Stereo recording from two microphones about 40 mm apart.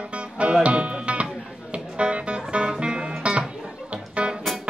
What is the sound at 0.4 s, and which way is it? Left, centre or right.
Music, right.